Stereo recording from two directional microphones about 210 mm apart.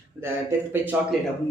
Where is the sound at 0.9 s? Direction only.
5° right (ahead or behind).